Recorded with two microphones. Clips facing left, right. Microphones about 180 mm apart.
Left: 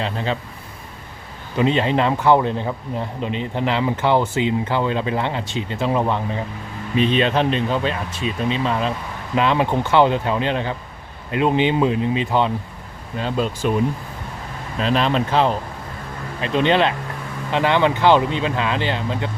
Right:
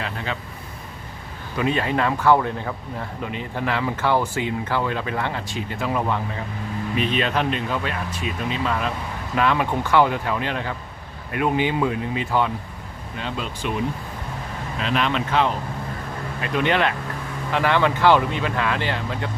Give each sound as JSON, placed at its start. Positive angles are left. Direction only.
{"t": 0.0, "sound": "speech", "side_deg": 30}
{"t": 1.5, "sound": "speech", "side_deg": 25}
{"t": 13.1, "sound": "speech", "side_deg": 40}
{"t": 14.8, "sound": "speech", "side_deg": 35}